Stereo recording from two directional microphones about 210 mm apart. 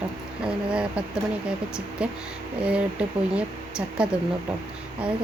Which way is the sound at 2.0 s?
5° right (ahead or behind).